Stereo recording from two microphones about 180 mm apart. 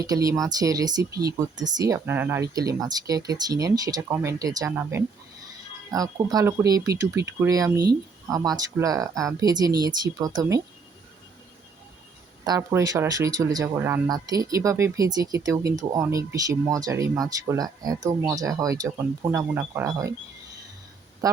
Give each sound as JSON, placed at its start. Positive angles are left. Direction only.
{"t": 0.0, "sound": "speech", "side_deg": -20}
{"t": 12.5, "sound": "speech", "side_deg": -20}